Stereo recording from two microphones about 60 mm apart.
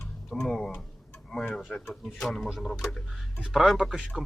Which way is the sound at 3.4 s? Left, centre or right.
Centre.